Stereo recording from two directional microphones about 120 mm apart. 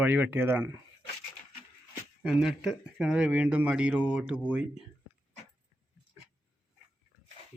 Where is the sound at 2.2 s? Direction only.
5° right (ahead or behind).